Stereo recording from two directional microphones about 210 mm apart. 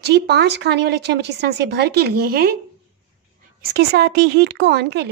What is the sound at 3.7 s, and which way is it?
Speech, 50° right (ahead or behind).